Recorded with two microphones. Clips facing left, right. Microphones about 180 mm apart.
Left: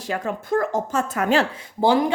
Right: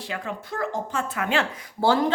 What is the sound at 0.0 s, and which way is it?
A woman's voice, 45° left (ahead or behind).